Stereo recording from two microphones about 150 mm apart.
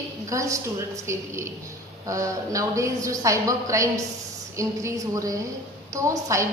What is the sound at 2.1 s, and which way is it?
A woman's voice, 20° right (ahead or behind).